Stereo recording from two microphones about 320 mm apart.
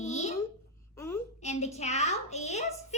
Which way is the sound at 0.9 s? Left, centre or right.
Centre.